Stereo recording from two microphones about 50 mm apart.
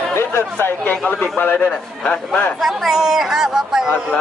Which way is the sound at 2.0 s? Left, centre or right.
Left.